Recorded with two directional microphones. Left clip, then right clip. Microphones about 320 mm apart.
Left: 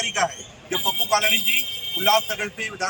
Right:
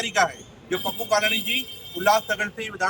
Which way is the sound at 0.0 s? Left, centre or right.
Centre.